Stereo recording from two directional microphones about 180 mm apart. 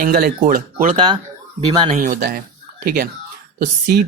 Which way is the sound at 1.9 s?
45° right (ahead or behind).